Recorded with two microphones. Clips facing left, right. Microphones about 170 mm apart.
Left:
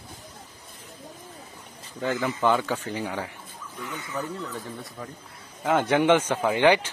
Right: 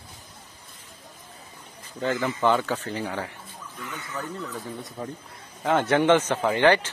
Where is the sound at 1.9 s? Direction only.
5° left (ahead or behind).